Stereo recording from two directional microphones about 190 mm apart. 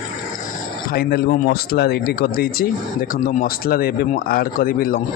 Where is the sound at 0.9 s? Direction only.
55° left (ahead or behind).